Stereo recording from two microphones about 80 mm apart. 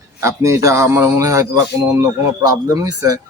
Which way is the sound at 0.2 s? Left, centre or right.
Right.